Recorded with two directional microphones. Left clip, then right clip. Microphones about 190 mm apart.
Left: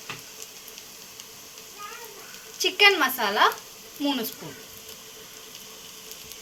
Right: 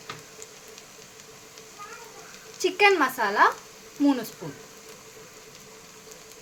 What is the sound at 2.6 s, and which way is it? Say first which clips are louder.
Speech: left 1 dB; 60° right (ahead or behind).